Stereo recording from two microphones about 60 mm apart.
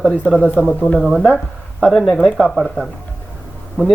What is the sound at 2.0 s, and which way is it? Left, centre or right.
Speech, centre.